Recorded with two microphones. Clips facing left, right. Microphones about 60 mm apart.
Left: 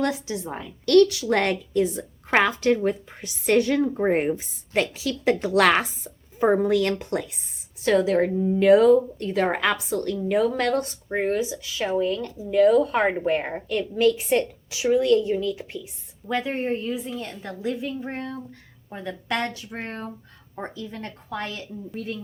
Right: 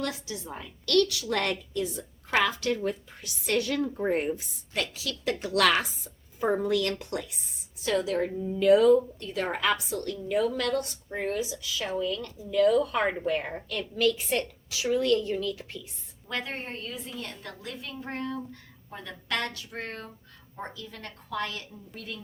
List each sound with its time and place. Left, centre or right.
0.9 s a woman's voice: left
4.0 s a woman's voice: left
9.9 s a woman's voice: left